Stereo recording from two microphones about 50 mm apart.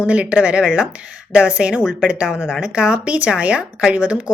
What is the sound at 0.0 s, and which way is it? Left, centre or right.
A woman's voice, right.